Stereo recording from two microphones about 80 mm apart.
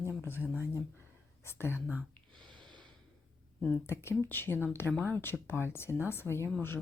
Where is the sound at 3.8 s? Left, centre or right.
Left.